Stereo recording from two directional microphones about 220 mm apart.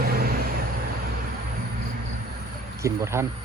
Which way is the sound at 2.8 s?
10° right (ahead or behind).